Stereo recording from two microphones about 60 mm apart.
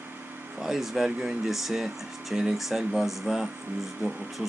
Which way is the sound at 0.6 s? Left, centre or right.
Centre.